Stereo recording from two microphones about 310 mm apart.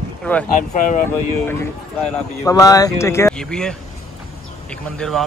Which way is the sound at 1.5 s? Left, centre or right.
Centre.